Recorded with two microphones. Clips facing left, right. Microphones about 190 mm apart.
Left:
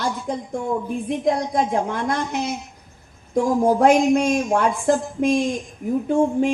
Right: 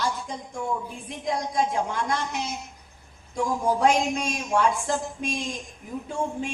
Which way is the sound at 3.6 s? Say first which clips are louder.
Left 6 dB; 55° left (ahead or behind).